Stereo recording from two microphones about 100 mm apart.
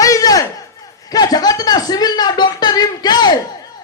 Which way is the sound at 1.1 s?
40° left (ahead or behind).